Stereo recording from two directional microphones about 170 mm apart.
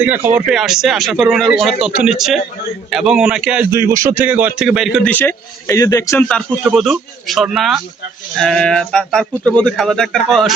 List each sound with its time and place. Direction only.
0.0 s speech: 10° right (ahead or behind)
3.7 s speech: 15° right (ahead or behind); by 5.1 s centre (ahead or behind)
5.1 s a man's voice: 15° left (ahead or behind)
6.2 s speech: centre (ahead or behind)